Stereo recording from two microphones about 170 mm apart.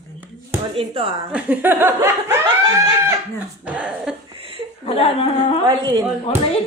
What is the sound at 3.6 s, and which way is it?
Laughter, 5° right (ahead or behind).